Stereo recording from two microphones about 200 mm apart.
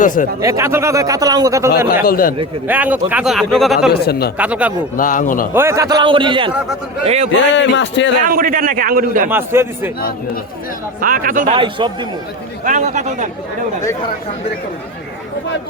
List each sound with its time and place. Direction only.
0.0 s speech: 40° left (ahead or behind)
0.4 s a man's voice: 15° right (ahead or behind)
2.0 s speech: 45° left (ahead or behind)
2.6 s a man's voice: 10° right (ahead or behind)
4.0 s speech: 50° left (ahead or behind)
4.4 s a man's voice: 5° right (ahead or behind)
4.9 s speech: 40° left (ahead or behind)
5.5 s a man's voice: 15° right (ahead or behind); by 7.3 s 30° right (ahead or behind)
7.5 s a man's voice: 65° left (ahead or behind)
8.3 s a man's voice: 45° right (ahead or behind)
9.3 s a man's voice: 10° right (ahead or behind)
11.0 s a man's voice: 45° right (ahead or behind)
11.5 s a man's voice: 25° right (ahead or behind)
12.6 s speech: 40° right (ahead or behind)